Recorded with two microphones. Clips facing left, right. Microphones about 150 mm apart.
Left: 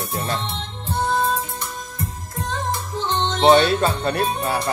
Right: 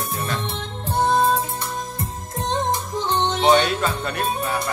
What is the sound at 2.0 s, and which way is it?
Music, 20° right (ahead or behind).